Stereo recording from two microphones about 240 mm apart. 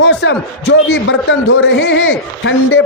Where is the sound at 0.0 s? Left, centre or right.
Left.